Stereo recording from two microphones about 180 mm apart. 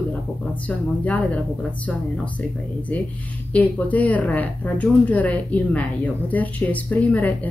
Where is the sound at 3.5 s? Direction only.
10° left (ahead or behind).